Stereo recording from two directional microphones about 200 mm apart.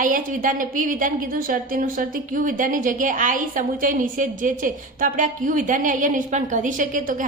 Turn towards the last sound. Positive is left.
turn(degrees=-40)  # may be behind; listen again after turning